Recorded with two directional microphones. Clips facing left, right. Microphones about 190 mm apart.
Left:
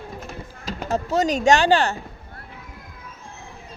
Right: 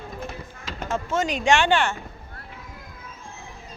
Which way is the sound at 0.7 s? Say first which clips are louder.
Left 3 dB; 40° left (ahead or behind).